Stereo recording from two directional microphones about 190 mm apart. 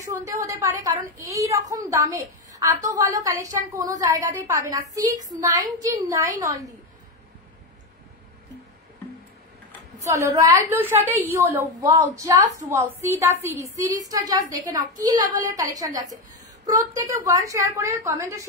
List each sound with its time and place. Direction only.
0.0 s a woman's voice: 15° right (ahead or behind)
10.0 s a woman's voice: 15° right (ahead or behind)